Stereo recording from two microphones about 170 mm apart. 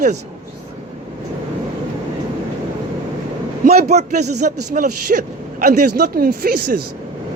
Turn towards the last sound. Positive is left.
turn(degrees=-55)  # may be behind; listen again after turning